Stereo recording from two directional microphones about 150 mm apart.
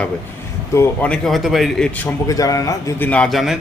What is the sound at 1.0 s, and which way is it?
Speech, 5° left (ahead or behind).